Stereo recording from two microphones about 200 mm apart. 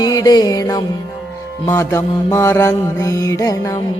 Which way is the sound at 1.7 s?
15° left (ahead or behind).